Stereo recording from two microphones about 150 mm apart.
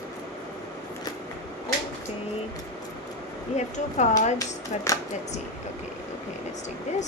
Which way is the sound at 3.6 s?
50° left (ahead or behind).